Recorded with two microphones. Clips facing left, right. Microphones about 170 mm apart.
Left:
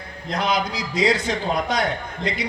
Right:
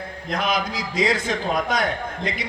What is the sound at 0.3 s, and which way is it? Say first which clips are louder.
A man's voice: left 1 dB; 50° right (ahead or behind).